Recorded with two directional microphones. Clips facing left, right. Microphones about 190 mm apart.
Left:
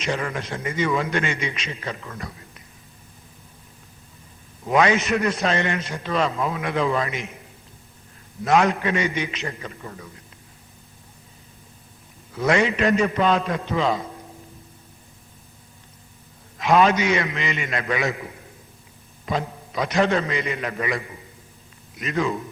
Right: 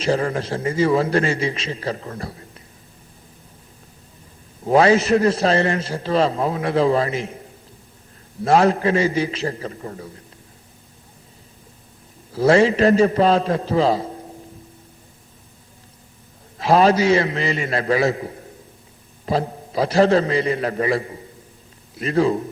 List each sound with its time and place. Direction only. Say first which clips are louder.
0.0 s a man's voice: right 6 dB; 35° right (ahead or behind)
4.6 s a man's voice: right 5 dB; 35° right (ahead or behind)
8.4 s a man's voice: right 4 dB; 35° right (ahead or behind)
12.3 s a man's voice: right 6 dB; 30° right (ahead or behind)
16.6 s a man's voice: right 3 dB; 35° right (ahead or behind)